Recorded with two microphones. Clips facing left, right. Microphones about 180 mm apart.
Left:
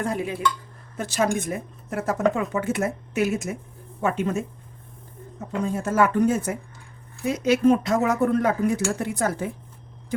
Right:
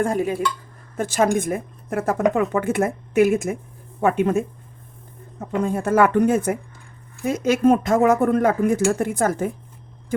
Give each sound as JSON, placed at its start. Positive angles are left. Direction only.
{"t": 0.0, "sound": "speech", "side_deg": -45}
{"t": 5.5, "sound": "speech", "side_deg": -55}